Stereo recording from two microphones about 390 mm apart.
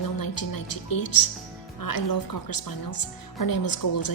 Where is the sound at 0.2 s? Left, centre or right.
Left.